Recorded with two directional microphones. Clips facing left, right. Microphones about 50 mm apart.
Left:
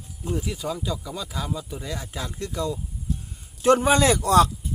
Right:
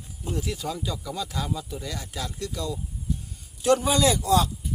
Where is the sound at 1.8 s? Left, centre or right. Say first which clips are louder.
Left 1 dB; centre.